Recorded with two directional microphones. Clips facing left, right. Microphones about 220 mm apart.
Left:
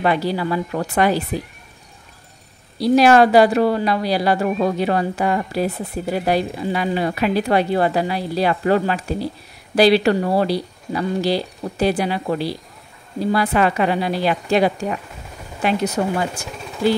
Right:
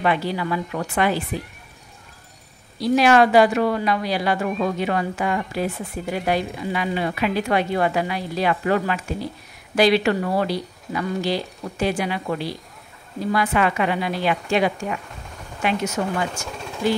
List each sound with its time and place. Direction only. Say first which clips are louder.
0.0 s speech: left 3 dB; 35° left (ahead or behind)
2.8 s speech: left 3 dB; 35° left (ahead or behind)
16.4 s speech: even; 5° left (ahead or behind)